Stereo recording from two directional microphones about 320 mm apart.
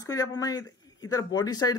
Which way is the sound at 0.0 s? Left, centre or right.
Centre.